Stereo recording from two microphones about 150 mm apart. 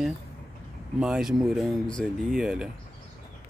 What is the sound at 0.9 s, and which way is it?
Speech, 5° right (ahead or behind).